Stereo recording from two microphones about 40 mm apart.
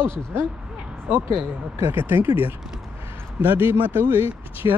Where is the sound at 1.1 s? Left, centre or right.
Right.